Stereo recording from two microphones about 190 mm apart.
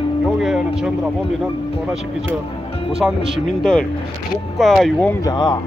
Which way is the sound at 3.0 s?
5° right (ahead or behind).